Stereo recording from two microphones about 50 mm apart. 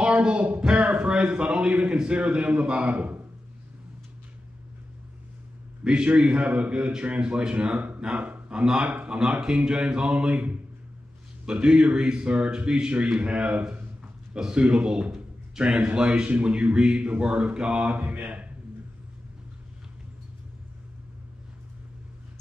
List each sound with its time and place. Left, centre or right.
0.0 s a sound: right
1.8 s a man's voice: centre
5.9 s a man's voice: centre
17.9 s a man's voice: right